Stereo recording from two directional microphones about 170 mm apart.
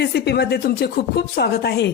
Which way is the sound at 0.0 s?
75° left (ahead or behind).